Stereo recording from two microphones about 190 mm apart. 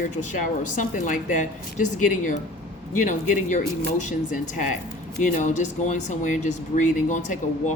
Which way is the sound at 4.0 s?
40° left (ahead or behind).